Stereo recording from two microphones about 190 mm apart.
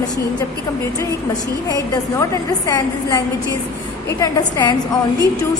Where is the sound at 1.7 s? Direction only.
20° left (ahead or behind).